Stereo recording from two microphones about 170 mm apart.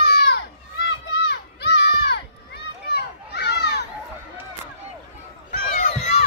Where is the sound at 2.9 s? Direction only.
75° left (ahead or behind).